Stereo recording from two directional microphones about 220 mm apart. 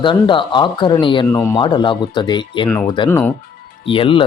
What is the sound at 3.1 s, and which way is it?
Speech, 10° left (ahead or behind).